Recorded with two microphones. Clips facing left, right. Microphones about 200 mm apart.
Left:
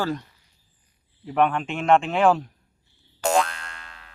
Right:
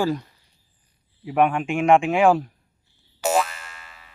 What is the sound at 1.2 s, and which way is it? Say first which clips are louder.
A man's voice: right 2 dB; 10° right (ahead or behind).